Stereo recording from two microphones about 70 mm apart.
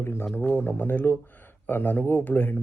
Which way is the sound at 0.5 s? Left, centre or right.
Left.